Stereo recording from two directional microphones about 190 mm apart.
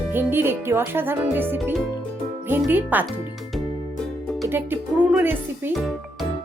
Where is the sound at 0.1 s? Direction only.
10° right (ahead or behind).